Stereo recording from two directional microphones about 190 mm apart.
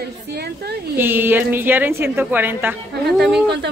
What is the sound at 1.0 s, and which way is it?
Speech, 10° right (ahead or behind).